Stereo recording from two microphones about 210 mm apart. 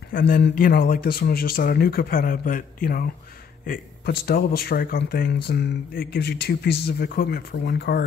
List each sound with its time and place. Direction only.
0.1 s speech: 50° left (ahead or behind)